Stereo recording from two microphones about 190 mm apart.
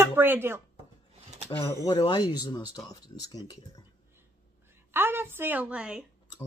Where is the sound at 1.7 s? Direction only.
20° left (ahead or behind).